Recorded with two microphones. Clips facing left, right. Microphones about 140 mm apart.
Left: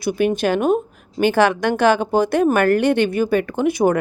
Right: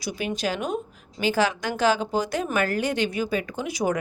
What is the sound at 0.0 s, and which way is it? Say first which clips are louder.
Speech: left 10 dB; 55° left (ahead or behind).